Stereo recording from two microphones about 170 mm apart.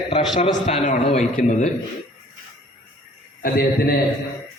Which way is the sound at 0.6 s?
45° left (ahead or behind).